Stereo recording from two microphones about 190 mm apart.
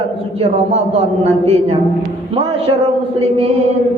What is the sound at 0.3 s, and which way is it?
A man's voice, 35° right (ahead or behind).